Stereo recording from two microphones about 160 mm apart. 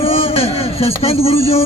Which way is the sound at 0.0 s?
35° left (ahead or behind).